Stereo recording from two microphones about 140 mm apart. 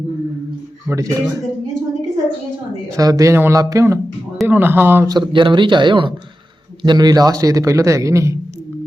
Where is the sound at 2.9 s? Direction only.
25° right (ahead or behind).